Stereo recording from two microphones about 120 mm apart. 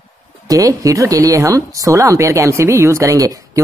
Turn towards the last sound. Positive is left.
turn(degrees=-25)  # may be behind; listen again after turning